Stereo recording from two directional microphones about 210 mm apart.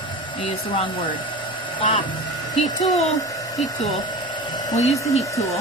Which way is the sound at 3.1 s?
15° left (ahead or behind).